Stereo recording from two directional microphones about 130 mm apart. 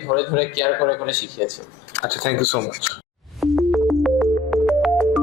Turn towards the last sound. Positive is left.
turn(degrees=5)  # may be behind; listen again after turning